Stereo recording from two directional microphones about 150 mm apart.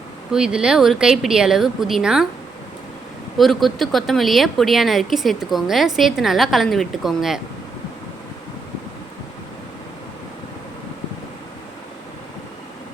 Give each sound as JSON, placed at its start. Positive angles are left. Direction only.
{"t": 0.3, "sound": "speech", "side_deg": -5}
{"t": 3.3, "sound": "speech", "side_deg": 0}